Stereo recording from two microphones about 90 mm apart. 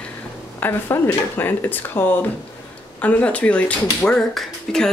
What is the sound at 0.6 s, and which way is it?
Speech, 25° left (ahead or behind).